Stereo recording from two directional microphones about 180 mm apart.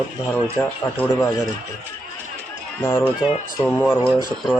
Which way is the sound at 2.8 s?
10° left (ahead or behind).